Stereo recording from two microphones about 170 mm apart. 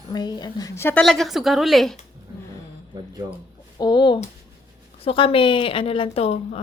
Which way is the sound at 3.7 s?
25° left (ahead or behind).